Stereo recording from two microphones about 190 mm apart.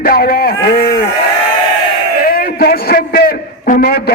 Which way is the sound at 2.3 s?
50° left (ahead or behind).